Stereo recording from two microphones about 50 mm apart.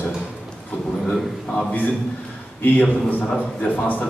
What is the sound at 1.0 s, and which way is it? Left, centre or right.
Speech, centre.